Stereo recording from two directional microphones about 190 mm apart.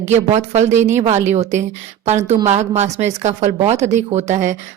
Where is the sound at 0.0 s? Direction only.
35° right (ahead or behind).